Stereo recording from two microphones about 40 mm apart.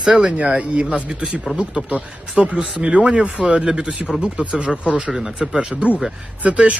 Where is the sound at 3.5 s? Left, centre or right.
Centre.